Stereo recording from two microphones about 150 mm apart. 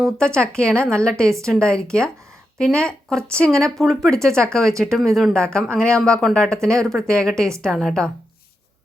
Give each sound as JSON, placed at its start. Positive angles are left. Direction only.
{"t": 0.0, "sound": "speech", "side_deg": 5}
{"t": 4.3, "sound": "speech", "side_deg": -20}
{"t": 4.8, "sound": "speech", "side_deg": 5}